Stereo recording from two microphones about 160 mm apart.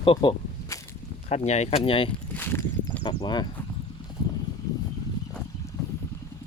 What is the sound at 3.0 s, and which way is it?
Speech, 25° left (ahead or behind).